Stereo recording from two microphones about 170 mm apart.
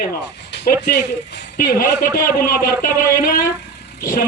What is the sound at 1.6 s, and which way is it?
A man's voice, 55° left (ahead or behind).